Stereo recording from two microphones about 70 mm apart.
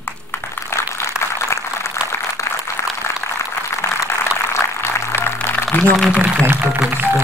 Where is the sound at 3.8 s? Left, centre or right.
Left.